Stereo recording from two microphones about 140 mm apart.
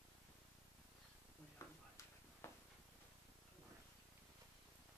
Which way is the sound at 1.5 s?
20° left (ahead or behind).